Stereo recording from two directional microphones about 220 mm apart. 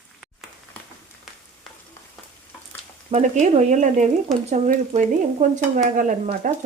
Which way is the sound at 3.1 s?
35° right (ahead or behind).